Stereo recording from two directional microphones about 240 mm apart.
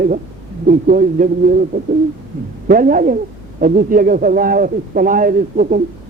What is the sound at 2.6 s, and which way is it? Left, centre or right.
A man's voice, right.